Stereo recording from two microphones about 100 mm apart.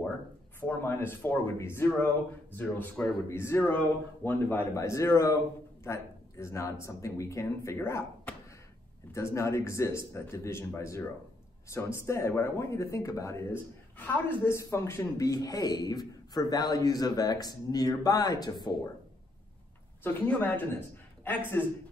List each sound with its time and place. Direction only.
0.6 s speech: 20° left (ahead or behind)
4.7 s speech: 30° left (ahead or behind)
8.3 s a sound: 10° left (ahead or behind)
9.1 s speech: 30° left (ahead or behind); by 18.8 s 45° left (ahead or behind)
20.0 s a man's voice: 20° left (ahead or behind)